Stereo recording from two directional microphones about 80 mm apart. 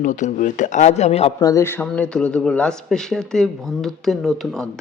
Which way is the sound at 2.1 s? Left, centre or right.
Centre.